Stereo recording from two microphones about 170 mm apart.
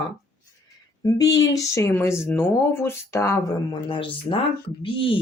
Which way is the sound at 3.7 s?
30° left (ahead or behind).